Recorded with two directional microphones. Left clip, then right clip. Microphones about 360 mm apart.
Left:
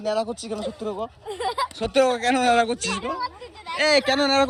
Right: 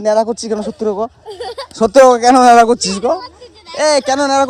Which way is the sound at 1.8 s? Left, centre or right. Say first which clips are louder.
Right 14 dB; right.